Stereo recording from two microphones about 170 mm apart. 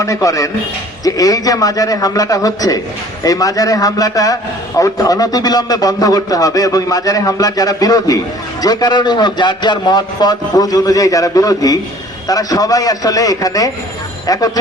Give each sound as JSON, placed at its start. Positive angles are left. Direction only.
{"t": 0.0, "sound": "a man's voice", "side_deg": 20}